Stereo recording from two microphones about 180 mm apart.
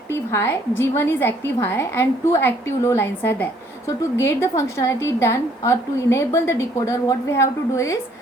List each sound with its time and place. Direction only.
0.1 s a woman's voice: 15° left (ahead or behind)